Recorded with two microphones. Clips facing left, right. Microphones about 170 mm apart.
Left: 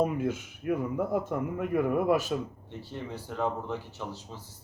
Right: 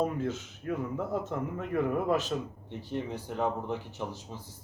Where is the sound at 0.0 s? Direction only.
10° left (ahead or behind).